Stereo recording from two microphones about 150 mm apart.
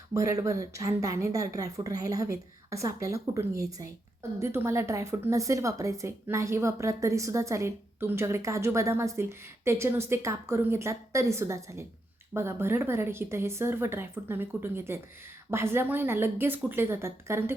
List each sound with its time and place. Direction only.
0.1 s a woman's voice: 20° right (ahead or behind)